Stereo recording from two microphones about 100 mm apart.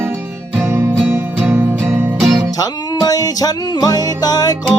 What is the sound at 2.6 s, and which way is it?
Music, 40° left (ahead or behind).